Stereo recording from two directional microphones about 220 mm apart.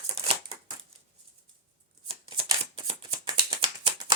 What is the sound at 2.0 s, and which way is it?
Shuffling cards, 20° right (ahead or behind).